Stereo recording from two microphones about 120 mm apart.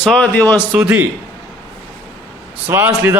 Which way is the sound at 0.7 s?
15° right (ahead or behind).